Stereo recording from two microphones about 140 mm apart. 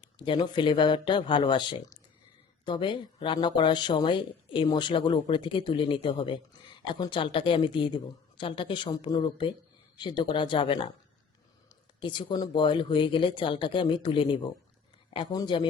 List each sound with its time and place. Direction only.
0.0 s speech: 35° left (ahead or behind)
11.9 s speech: 35° left (ahead or behind)